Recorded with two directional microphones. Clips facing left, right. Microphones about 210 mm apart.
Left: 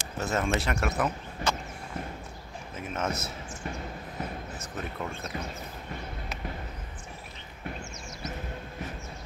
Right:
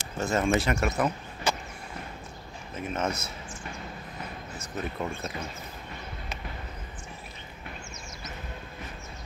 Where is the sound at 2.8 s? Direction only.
5° left (ahead or behind).